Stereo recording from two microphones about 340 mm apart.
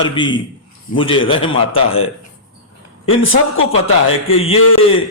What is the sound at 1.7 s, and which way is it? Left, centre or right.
Speech, left.